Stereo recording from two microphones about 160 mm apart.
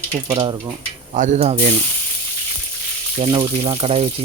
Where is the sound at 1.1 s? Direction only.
50° right (ahead or behind).